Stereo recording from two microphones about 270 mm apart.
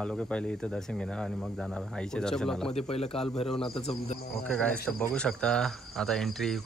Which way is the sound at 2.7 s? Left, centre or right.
Left.